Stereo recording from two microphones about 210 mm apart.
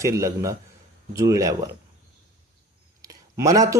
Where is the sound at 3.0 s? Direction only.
15° right (ahead or behind).